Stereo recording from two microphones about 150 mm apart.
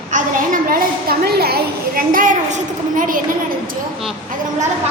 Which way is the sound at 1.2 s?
90° right.